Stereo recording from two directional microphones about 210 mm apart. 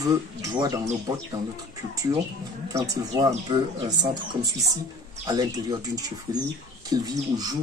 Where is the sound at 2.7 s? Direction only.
15° right (ahead or behind).